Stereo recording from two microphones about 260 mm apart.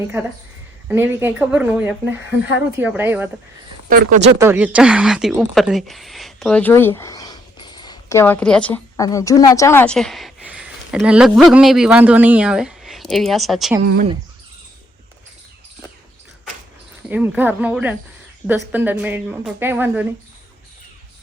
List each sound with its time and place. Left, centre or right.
0.9 s a woman's voice: centre
3.8 s speech: right
4.4 s speech: centre
13.8 s speech: right
17.1 s a woman's voice: centre